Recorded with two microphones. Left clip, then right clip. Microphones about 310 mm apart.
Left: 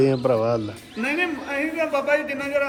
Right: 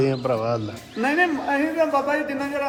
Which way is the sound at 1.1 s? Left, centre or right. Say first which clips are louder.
Right 4 dB; centre.